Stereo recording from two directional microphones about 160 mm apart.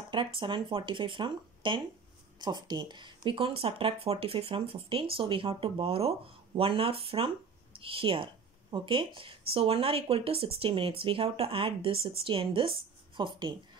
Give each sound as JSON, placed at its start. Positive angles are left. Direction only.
{"t": 0.1, "sound": "speech", "side_deg": -30}